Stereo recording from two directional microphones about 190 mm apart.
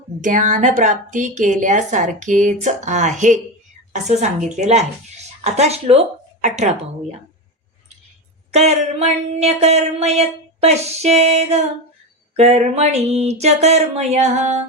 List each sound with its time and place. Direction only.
0.2 s a woman's voice: 40° right (ahead or behind)
8.5 s a woman's voice: 35° right (ahead or behind)